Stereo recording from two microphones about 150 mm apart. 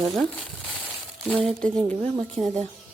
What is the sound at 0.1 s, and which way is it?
Speech, centre (ahead or behind).